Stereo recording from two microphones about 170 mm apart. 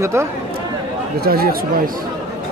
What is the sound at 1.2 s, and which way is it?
Speech, 60° right (ahead or behind).